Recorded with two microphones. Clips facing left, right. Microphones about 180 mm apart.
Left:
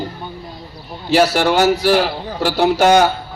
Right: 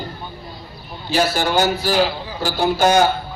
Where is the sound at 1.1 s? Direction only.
75° left (ahead or behind).